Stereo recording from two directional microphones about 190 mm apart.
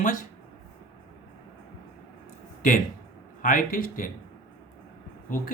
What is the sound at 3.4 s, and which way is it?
Speech, 45° left (ahead or behind).